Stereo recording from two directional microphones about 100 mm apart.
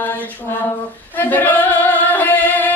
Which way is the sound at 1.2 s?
15° left (ahead or behind).